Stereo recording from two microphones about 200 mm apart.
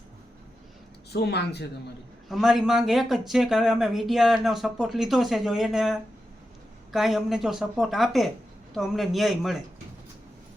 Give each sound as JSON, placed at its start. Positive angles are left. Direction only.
{"t": 1.1, "sound": "speech", "side_deg": 55}
{"t": 2.3, "sound": "speech", "side_deg": 0}